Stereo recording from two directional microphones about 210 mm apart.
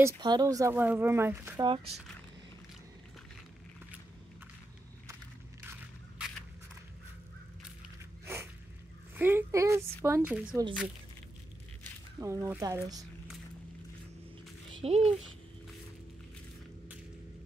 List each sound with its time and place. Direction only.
0.0 s speech: 20° right (ahead or behind)
5.6 s biting: 10° right (ahead or behind)
9.1 s speech: 10° right (ahead or behind)
12.2 s speech: 15° right (ahead or behind)
14.8 s speech: 30° right (ahead or behind)